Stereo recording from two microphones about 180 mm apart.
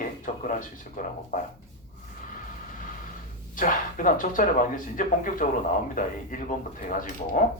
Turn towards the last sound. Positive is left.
turn(degrees=45)  # may be behind; listen again after turning